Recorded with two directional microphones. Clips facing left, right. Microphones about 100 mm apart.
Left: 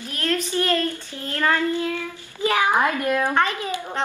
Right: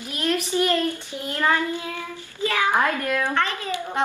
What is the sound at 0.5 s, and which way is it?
Child singing, 15° right (ahead or behind).